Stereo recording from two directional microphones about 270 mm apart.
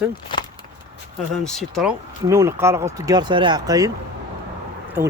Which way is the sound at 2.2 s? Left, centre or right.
Centre.